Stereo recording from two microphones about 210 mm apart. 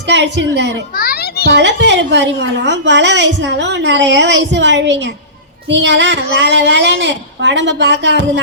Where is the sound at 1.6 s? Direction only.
55° right (ahead or behind).